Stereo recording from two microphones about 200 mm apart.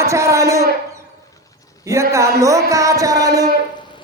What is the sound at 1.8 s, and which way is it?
Speech, 15° right (ahead or behind).